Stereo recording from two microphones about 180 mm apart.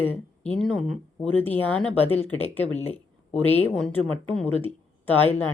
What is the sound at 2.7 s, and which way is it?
Speech, 35° left (ahead or behind).